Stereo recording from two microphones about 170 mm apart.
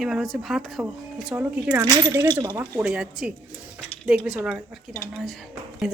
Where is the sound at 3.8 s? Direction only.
5° left (ahead or behind).